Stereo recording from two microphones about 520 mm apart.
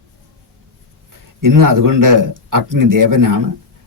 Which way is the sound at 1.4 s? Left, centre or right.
Right.